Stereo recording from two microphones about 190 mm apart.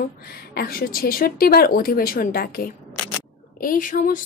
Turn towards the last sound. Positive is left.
turn(degrees=45)  # may be behind; listen again after turning